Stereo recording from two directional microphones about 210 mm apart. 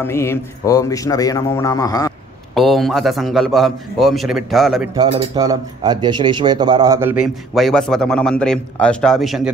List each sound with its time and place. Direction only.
0.0 s speech: 10° left (ahead or behind)
2.5 s a man's voice: centre (ahead or behind)
4.9 s speech: 25° right (ahead or behind); by 7.2 s 10° right (ahead or behind)
7.5 s a man's voice: centre (ahead or behind)